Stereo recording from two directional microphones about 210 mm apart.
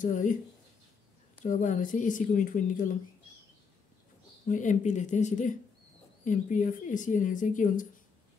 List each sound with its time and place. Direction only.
0.0 s speech: 35° left (ahead or behind)
1.4 s speech: 40° left (ahead or behind)
4.5 s speech: 35° left (ahead or behind)